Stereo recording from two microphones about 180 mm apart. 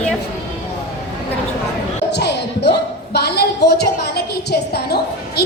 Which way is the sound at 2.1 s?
70° left (ahead or behind).